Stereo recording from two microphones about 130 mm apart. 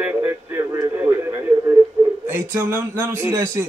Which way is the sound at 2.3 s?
20° right (ahead or behind).